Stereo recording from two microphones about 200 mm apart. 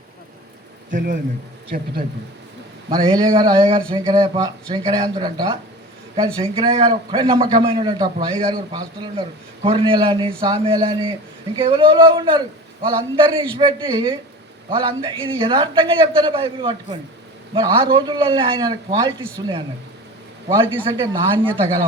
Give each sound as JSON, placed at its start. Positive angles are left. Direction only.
{"t": 0.9, "sound": "a man's voice", "side_deg": -40}
{"t": 2.9, "sound": "speech", "side_deg": -20}
{"t": 20.8, "sound": "speech", "side_deg": -25}